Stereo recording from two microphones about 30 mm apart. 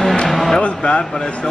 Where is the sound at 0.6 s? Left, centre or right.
Left.